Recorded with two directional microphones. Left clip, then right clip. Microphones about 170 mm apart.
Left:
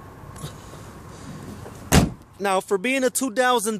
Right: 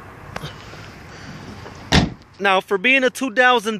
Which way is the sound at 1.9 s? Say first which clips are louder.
Right 2 dB; 10° left (ahead or behind).